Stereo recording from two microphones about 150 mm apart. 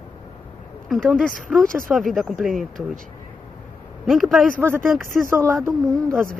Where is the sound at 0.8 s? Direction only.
Centre (ahead or behind).